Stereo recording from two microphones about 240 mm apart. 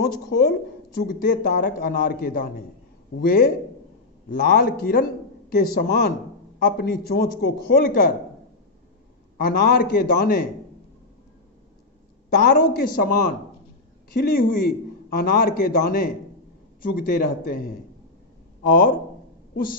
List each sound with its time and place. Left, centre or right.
0.2 s a man's voice: left
9.4 s a man's voice: left
12.3 s a man's voice: left
14.1 s a man's voice: left
18.7 s a man's voice: left